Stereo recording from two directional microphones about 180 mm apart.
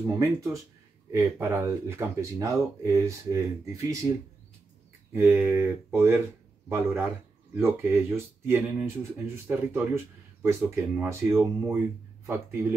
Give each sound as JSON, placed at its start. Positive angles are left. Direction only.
{"t": 0.0, "sound": "speech", "side_deg": -20}
{"t": 5.1, "sound": "speech", "side_deg": -10}